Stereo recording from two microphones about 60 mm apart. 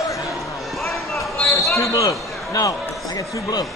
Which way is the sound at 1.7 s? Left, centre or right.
Left.